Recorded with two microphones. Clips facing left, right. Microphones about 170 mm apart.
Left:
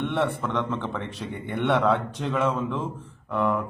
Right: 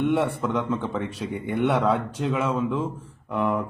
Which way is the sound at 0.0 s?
10° right (ahead or behind).